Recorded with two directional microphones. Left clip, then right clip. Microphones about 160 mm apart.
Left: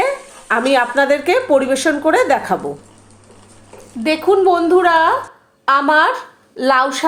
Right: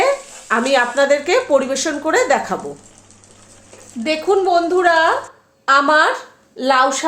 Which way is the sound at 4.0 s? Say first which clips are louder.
Left 3 dB; 25° left (ahead or behind).